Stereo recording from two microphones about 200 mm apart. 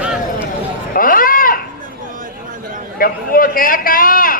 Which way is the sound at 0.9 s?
45° left (ahead or behind).